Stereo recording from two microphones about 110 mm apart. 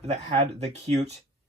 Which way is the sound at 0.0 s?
80° right.